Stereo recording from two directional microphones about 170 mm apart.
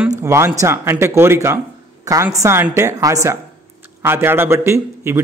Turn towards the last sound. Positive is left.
turn(degrees=-15)  # may be behind; listen again after turning